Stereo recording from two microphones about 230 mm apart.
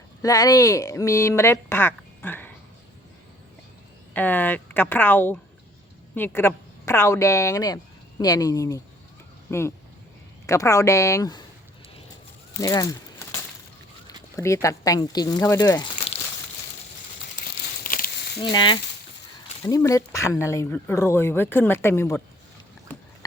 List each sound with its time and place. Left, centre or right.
0.2 s speech: centre
4.1 s speech: centre
12.5 s speech: centre
14.3 s speech: centre
17.8 s a sound: left
18.4 s speech: left